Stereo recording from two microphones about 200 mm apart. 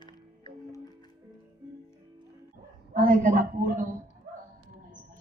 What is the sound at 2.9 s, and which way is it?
Speech, 45° right (ahead or behind).